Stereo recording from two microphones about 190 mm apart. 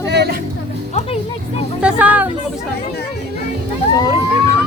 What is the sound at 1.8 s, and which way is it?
Speech, 10° right (ahead or behind).